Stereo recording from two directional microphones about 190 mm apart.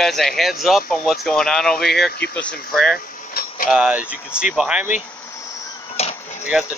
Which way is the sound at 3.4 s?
55° left (ahead or behind).